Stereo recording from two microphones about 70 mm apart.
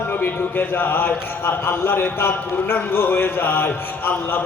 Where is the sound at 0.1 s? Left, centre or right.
Left.